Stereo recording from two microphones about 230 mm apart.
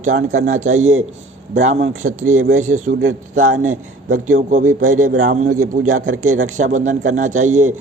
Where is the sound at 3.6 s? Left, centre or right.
Right.